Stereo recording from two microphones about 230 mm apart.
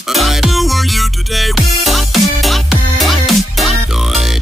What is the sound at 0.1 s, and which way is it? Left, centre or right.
Music, centre.